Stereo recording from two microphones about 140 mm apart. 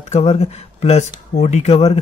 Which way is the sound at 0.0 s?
50° left (ahead or behind).